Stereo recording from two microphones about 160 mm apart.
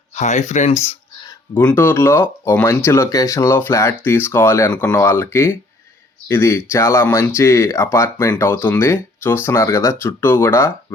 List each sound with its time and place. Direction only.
0.2 s speech: 45° left (ahead or behind)
1.6 s speech: 15° left (ahead or behind)